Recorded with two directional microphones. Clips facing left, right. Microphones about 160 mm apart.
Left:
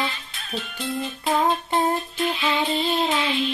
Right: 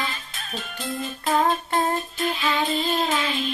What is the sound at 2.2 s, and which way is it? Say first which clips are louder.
Child singing: left 1 dB; 45° right (ahead or behind).